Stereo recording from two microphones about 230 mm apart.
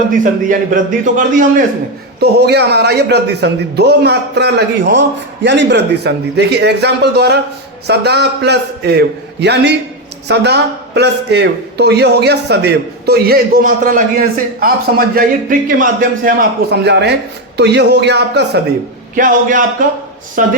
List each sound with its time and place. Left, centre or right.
0.2 s a man's voice: right
2.2 s a man's voice: right
19.1 s a man's voice: right